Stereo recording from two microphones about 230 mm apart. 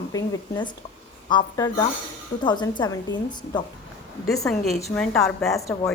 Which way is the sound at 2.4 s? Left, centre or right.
Centre.